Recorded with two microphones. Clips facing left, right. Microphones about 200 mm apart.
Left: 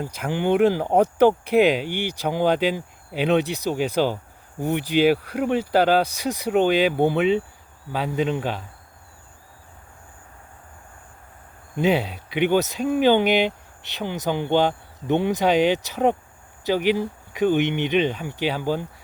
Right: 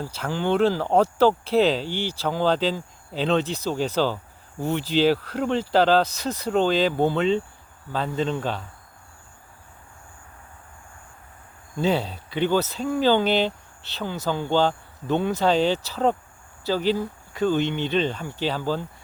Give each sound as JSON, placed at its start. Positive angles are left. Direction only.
{"t": 0.0, "sound": "speech", "side_deg": 15}
{"t": 11.8, "sound": "speech", "side_deg": 15}